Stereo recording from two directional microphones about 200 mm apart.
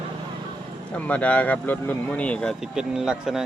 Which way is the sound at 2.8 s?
5° right (ahead or behind).